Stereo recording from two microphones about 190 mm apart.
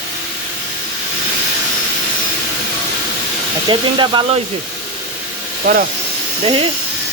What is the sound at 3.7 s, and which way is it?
Speech, 25° right (ahead or behind).